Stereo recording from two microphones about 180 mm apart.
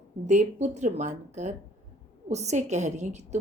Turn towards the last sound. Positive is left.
turn(degrees=-40)  # may be behind; listen again after turning